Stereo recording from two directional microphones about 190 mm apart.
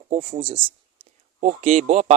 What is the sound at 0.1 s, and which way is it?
Speech, 30° right (ahead or behind).